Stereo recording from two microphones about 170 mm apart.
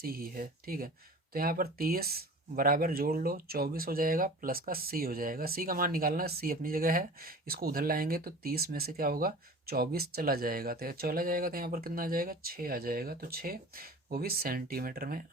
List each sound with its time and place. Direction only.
0.0 s speech: 60° right (ahead or behind)